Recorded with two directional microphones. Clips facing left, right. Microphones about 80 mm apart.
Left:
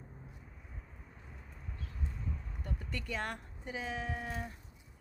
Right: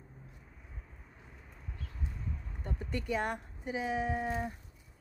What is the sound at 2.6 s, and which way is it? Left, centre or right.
Speech, right.